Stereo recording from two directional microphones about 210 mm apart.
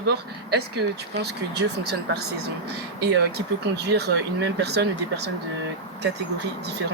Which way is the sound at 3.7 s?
50° right (ahead or behind).